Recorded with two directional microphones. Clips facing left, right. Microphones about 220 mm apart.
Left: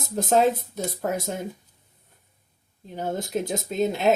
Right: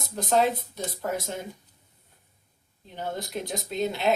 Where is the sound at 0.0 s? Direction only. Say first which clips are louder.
Left 3 dB; 45° left (ahead or behind).